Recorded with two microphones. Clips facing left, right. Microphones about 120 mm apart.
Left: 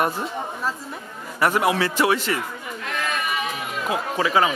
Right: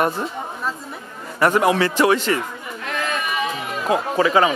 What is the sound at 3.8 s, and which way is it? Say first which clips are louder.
Speech: right 5 dB; 35° right (ahead or behind).